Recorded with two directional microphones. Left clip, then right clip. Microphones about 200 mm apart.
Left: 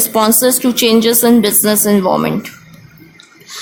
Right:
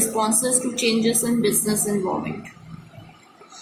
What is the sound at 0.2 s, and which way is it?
A woman's voice, 45° left (ahead or behind).